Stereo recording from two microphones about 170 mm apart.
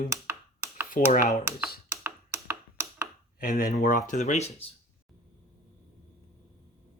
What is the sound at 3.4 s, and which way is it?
Speech, 60° left (ahead or behind).